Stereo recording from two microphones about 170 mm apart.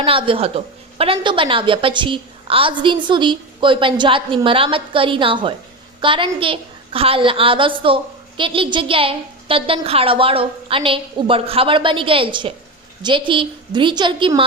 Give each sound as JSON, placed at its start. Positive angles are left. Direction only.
{"t": 0.0, "sound": "a woman's voice", "side_deg": -30}